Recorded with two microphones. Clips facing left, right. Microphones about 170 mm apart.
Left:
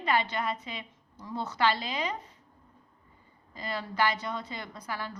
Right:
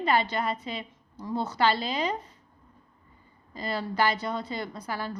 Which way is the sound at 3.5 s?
35° right (ahead or behind).